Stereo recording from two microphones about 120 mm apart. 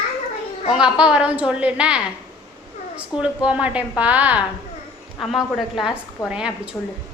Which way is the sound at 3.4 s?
10° right (ahead or behind).